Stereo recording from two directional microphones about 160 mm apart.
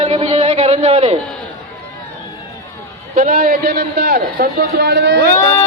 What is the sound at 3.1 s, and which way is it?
Speech, 50° right (ahead or behind).